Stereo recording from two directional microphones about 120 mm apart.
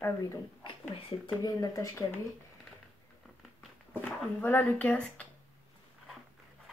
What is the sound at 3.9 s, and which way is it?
Speech, 15° left (ahead or behind).